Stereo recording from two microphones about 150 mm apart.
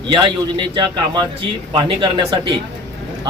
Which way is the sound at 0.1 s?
30° right (ahead or behind).